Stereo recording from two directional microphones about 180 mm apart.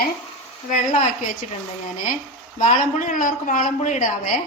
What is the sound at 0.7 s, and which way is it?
Speech, 45° left (ahead or behind).